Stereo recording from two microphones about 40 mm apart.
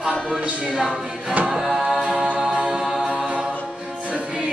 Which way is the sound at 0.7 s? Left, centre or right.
Centre.